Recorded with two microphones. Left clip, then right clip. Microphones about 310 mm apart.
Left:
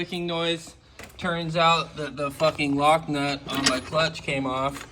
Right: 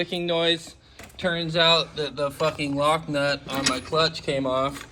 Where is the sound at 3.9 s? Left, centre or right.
Right.